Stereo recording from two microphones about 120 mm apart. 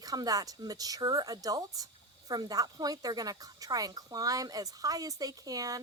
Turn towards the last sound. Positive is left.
turn(degrees=-30)  # may be behind; listen again after turning